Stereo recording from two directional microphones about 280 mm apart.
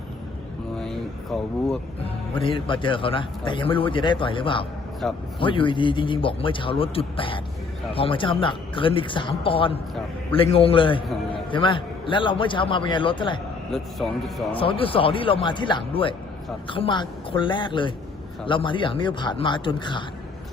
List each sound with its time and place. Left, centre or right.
0.8 s a sound: centre
2.3 s a man's voice: centre
5.0 s a man's voice: centre
5.4 s a man's voice: centre
13.7 s a man's voice: centre
14.5 s a man's voice: centre